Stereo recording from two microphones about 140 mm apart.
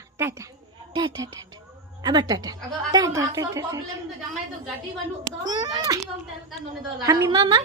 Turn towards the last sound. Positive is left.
turn(degrees=-35)  # may be behind; listen again after turning